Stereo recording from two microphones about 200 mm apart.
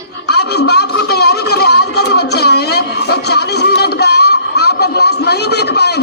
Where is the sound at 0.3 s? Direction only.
55° left (ahead or behind).